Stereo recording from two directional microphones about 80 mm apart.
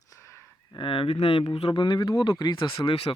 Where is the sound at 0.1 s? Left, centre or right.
Left.